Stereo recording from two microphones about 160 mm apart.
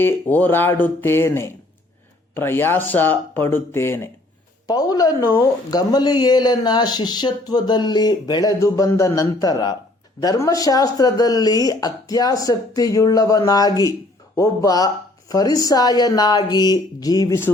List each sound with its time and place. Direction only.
0.0 s speech: 10° left (ahead or behind)